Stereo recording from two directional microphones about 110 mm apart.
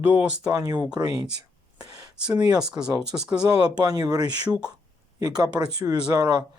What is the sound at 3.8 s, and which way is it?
Speech, 35° right (ahead or behind).